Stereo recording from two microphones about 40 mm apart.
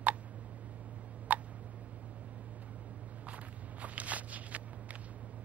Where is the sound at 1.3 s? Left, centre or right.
Right.